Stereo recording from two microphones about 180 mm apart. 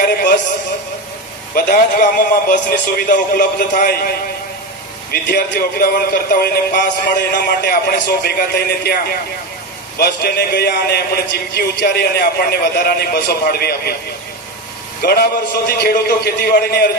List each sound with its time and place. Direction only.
0.0 s a sound: 55° left (ahead or behind)
1.5 s a man's voice: 50° left (ahead or behind)
5.1 s a man's voice: 55° left (ahead or behind)
15.0 s a man's voice: 60° left (ahead or behind)